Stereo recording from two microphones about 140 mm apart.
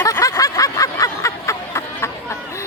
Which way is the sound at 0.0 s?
25° left (ahead or behind).